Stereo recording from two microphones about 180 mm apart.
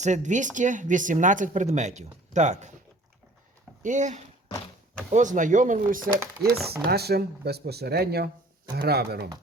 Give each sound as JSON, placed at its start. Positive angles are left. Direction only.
{"t": 0.0, "sound": "speech", "side_deg": -40}
{"t": 3.8, "sound": "speech", "side_deg": -40}
{"t": 4.4, "sound": "a sound", "side_deg": 30}
{"t": 5.1, "sound": "speech", "side_deg": -45}
{"t": 6.4, "sound": "speech", "side_deg": -60}